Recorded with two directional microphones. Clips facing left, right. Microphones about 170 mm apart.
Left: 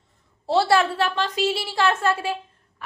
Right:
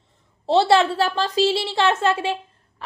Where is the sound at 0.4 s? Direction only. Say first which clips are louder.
Right 3 dB; 20° right (ahead or behind).